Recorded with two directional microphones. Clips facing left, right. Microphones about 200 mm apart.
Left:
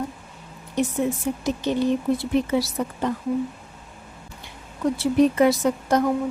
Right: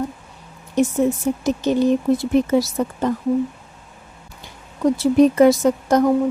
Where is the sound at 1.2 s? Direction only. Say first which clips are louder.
Right 5 dB; 45° right (ahead or behind).